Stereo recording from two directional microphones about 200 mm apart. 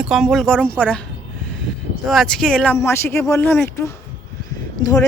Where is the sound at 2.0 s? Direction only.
Centre (ahead or behind).